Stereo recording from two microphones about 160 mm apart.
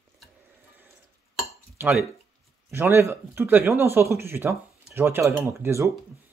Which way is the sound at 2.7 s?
15° right (ahead or behind).